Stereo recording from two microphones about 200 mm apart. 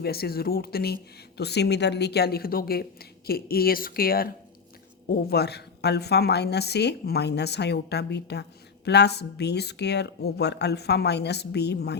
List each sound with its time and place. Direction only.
0.0 s a woman's voice: 50° left (ahead or behind)